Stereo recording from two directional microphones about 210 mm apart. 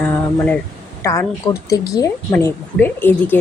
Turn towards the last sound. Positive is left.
turn(degrees=10)  # may be behind; listen again after turning